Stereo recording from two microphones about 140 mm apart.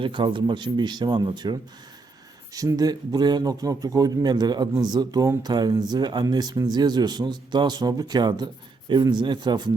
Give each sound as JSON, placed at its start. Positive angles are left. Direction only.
{"t": 0.0, "sound": "a man's voice", "side_deg": -35}